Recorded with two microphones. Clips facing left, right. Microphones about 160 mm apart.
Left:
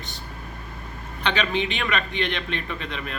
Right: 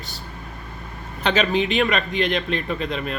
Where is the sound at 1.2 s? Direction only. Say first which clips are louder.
Right 4 dB; 40° right (ahead or behind).